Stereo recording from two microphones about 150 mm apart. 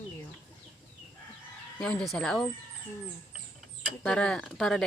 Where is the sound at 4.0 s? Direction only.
5° left (ahead or behind).